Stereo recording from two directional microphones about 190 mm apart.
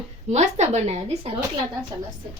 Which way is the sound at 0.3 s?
35° right (ahead or behind).